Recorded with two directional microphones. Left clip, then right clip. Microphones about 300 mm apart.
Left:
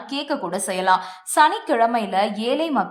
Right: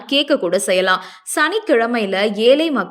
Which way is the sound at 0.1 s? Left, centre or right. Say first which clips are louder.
Right 10 dB; centre.